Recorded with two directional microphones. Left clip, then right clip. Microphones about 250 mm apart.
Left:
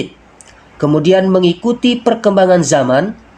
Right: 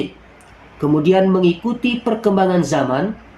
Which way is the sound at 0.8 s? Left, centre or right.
Left.